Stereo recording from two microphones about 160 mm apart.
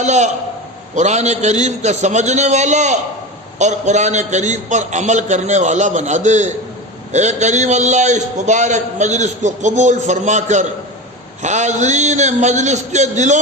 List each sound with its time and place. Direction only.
0.0 s a man's voice: 45° right (ahead or behind)